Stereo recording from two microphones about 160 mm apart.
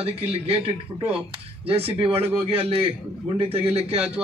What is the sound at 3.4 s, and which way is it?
Speech, 35° right (ahead or behind).